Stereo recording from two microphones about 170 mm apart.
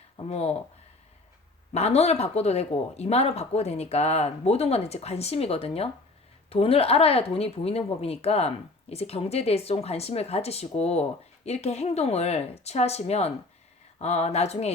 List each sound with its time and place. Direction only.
0.2 s a woman's voice: 40° left (ahead or behind)
1.7 s a woman's voice: 40° left (ahead or behind)